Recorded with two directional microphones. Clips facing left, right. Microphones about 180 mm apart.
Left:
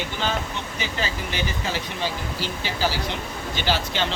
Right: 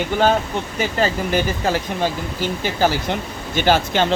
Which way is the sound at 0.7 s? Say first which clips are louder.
Right 9 dB; 50° right (ahead or behind).